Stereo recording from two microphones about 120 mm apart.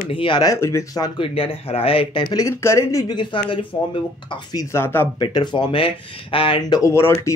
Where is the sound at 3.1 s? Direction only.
40° left (ahead or behind).